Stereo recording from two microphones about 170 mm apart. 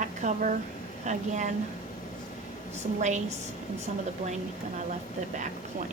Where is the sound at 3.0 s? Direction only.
45° right (ahead or behind).